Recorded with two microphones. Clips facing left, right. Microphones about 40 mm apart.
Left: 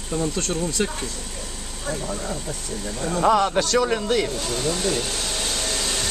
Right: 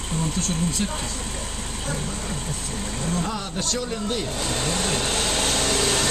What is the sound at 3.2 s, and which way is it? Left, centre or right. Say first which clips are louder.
Speech: left 10 dB; left.